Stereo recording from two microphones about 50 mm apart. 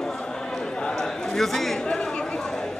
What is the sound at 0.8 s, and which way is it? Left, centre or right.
Chatter, centre.